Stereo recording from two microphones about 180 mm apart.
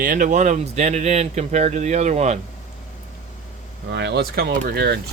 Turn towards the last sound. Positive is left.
turn(degrees=-60)  # may be behind; listen again after turning